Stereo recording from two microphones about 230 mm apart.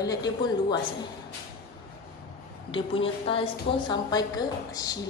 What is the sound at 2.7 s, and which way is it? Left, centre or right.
A woman's voice, left.